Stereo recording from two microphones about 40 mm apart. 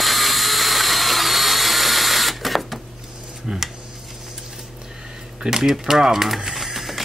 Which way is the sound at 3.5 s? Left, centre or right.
Centre.